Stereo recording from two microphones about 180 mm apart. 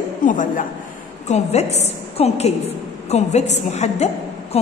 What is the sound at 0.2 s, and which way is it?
A woman's voice, 45° left (ahead or behind).